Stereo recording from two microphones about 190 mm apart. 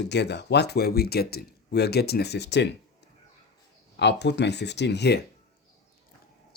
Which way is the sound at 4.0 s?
65° left (ahead or behind).